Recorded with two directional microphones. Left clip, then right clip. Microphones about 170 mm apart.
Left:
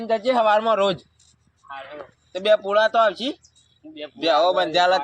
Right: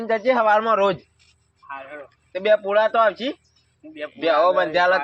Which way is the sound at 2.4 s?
10° right (ahead or behind).